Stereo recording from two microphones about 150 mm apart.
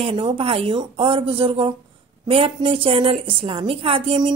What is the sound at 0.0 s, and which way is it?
A woman's voice, 35° right (ahead or behind).